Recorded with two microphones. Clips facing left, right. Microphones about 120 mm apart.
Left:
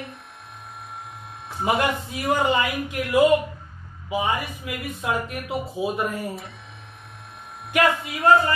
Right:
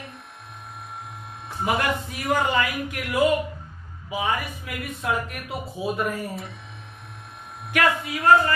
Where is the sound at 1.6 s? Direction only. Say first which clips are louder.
Left 2 dB; 25° left (ahead or behind).